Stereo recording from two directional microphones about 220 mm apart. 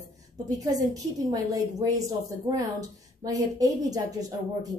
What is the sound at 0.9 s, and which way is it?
A woman's voice, 15° right (ahead or behind).